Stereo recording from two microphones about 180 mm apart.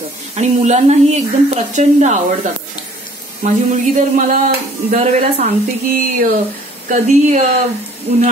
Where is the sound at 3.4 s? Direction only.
45° right (ahead or behind).